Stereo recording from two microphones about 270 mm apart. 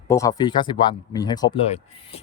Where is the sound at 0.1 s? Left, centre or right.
Centre.